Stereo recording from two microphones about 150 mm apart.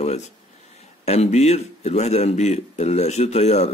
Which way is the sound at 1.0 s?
45° left (ahead or behind).